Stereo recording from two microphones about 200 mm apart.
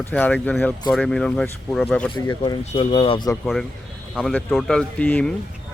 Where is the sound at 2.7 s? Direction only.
30° left (ahead or behind).